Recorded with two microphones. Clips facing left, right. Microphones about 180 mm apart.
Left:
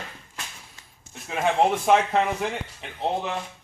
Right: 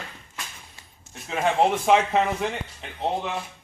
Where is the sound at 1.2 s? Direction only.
Centre (ahead or behind).